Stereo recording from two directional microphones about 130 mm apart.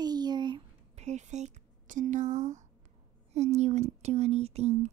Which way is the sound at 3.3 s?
60° right (ahead or behind).